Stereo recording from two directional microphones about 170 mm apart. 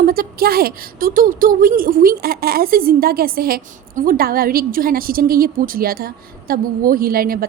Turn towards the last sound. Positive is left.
turn(degrees=-60)  # may be behind; listen again after turning